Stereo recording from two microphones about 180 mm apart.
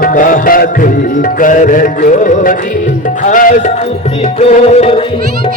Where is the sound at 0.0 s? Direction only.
50° left (ahead or behind).